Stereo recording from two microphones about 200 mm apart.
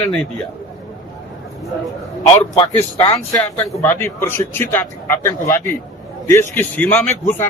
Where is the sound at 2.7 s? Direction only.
15° left (ahead or behind).